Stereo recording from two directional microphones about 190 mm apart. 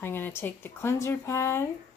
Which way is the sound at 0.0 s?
10° left (ahead or behind).